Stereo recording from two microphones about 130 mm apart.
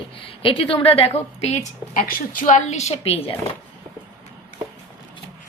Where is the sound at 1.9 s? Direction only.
90° left; by 3.3 s 50° left (ahead or behind).